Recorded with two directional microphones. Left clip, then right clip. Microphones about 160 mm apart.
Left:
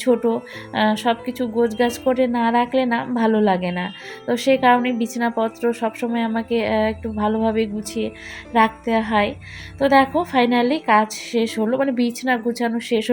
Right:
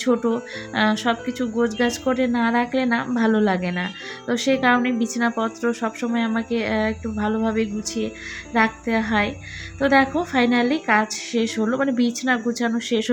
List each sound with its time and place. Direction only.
0.0 s speech: 10° left (ahead or behind)